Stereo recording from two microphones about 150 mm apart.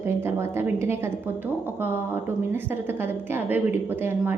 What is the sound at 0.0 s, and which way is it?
A woman's voice, 15° right (ahead or behind).